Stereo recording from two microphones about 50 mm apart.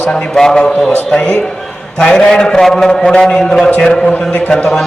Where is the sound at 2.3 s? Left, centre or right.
Centre.